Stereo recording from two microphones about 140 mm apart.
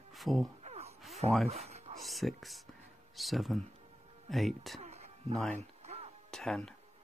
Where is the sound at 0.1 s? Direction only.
Centre (ahead or behind).